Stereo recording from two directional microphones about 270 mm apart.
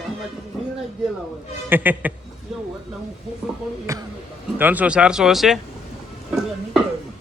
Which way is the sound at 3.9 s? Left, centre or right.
Centre.